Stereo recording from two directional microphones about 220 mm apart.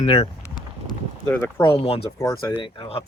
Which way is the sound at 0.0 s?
25° left (ahead or behind).